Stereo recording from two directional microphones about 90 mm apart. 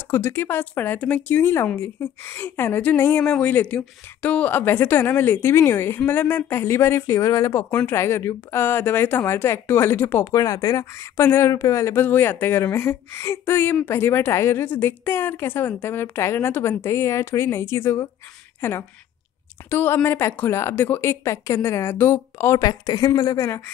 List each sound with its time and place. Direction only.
0.1 s speech: 25° left (ahead or behind)
10.3 s a woman's voice: 40° left (ahead or behind)
22.6 s speech: 45° left (ahead or behind)